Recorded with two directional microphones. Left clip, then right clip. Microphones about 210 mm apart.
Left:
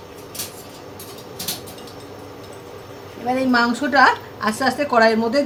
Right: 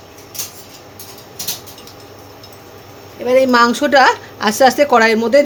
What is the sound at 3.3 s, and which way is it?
A woman's voice, 45° right (ahead or behind).